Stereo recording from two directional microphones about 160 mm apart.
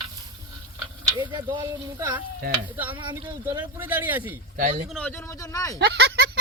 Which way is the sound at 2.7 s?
10° right (ahead or behind).